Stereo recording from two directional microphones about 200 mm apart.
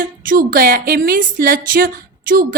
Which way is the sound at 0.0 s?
45° right (ahead or behind).